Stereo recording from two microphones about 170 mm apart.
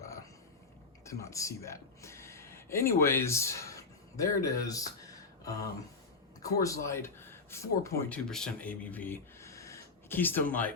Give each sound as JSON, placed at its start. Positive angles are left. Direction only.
{"t": 1.2, "sound": "a man's voice", "side_deg": 20}
{"t": 6.4, "sound": "a man's voice", "side_deg": 20}
{"t": 8.3, "sound": "speech", "side_deg": 5}